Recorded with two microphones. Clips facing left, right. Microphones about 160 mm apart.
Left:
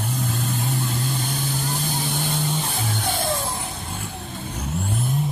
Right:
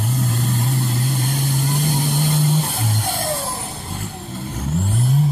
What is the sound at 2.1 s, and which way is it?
Vehicle, 5° right (ahead or behind).